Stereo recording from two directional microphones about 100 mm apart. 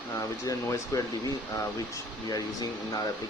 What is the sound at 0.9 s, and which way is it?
Speech, 35° left (ahead or behind).